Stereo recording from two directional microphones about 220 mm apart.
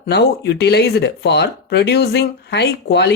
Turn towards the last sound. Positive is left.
turn(degrees=50)  # may be behind; listen again after turning